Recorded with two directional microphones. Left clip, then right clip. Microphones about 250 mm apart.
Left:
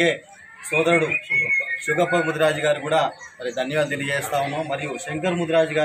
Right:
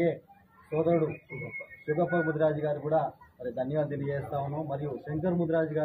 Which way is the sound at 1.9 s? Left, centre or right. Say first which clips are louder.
Left 7 dB; centre.